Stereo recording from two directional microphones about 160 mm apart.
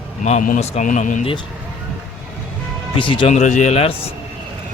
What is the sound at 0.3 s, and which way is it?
Speech, 50° left (ahead or behind).